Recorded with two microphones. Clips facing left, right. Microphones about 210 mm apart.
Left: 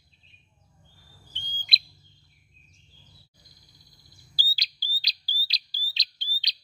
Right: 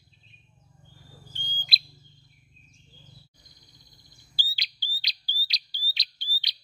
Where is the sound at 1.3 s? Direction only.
Centre (ahead or behind).